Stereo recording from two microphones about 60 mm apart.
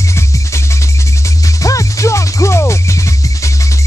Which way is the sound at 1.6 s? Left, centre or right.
Left.